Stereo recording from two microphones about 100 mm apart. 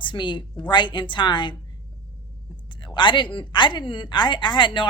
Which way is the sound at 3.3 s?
50° left (ahead or behind).